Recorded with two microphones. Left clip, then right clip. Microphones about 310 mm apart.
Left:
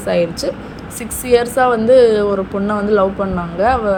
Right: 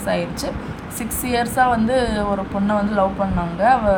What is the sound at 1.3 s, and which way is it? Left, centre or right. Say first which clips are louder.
Speech: left 5 dB; centre.